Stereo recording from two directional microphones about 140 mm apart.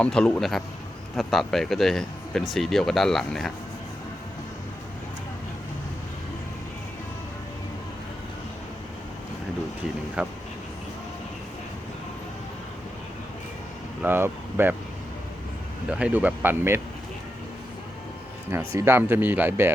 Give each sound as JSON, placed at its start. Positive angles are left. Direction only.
{"t": 0.0, "sound": "speech", "side_deg": 5}
{"t": 10.2, "sound": "speech", "side_deg": -10}
{"t": 14.0, "sound": "speech", "side_deg": -15}
{"t": 15.9, "sound": "speech", "side_deg": -10}
{"t": 18.8, "sound": "speech", "side_deg": -15}